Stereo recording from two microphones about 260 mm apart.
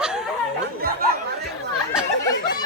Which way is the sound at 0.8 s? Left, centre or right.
Right.